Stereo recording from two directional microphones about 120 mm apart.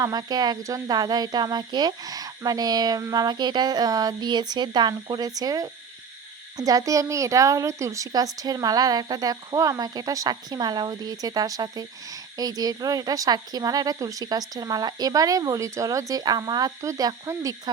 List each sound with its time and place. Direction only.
0.0 s a woman's voice: 35° right (ahead or behind)